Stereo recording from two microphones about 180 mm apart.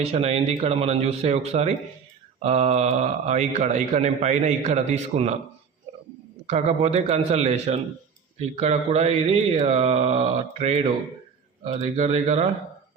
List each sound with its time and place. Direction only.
0.0 s speech: 35° right (ahead or behind)
6.5 s speech: 40° right (ahead or behind)